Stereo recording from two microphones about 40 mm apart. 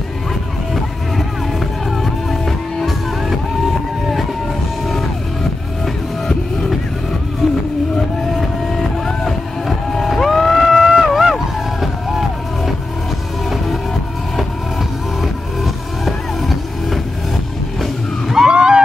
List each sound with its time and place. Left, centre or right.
2.4 s music: centre
8.3 s vehicle: centre
10.7 s vehicle: centre
11.1 s a sound: centre
11.8 s music: centre
16.1 s music: centre
18.3 s a sound: centre